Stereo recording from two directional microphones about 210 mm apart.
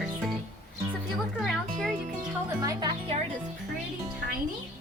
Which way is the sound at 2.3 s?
15° right (ahead or behind).